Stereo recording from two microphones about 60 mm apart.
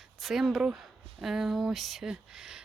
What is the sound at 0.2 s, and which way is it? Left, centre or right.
Speech, centre.